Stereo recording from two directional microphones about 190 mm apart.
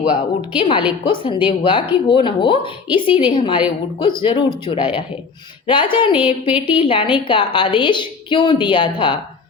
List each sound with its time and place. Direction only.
0.1 s speech: 25° left (ahead or behind)